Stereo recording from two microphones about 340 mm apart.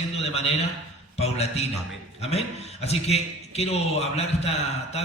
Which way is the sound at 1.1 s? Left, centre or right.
Centre.